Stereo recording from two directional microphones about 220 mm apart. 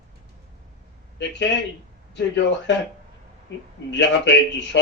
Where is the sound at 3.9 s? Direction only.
55° left (ahead or behind).